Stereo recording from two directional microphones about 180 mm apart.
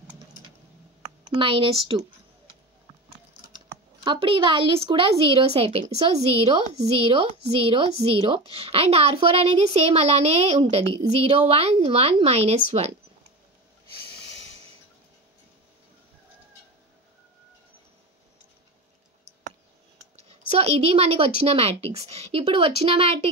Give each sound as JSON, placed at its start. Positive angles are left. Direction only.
{"t": 1.4, "sound": "speech", "side_deg": -30}
{"t": 3.4, "sound": "a woman's voice", "side_deg": -25}
{"t": 20.2, "sound": "a woman's voice", "side_deg": -35}